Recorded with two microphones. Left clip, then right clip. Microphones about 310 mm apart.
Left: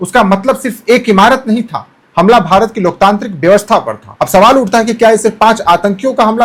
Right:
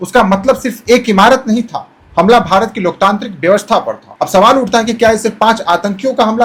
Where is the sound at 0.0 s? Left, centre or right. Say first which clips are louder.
Left 1 dB; left.